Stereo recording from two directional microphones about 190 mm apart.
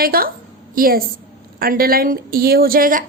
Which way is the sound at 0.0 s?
50° right (ahead or behind).